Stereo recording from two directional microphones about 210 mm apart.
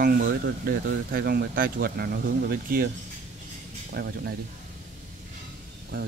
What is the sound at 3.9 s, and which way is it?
Speech, 50° right (ahead or behind).